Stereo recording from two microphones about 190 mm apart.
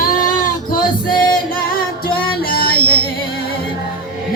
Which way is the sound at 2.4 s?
55° left (ahead or behind).